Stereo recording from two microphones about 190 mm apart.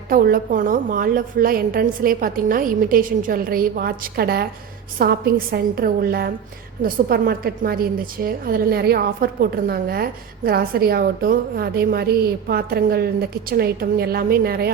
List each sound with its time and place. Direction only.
0.1 s a woman's voice: 50° right (ahead or behind)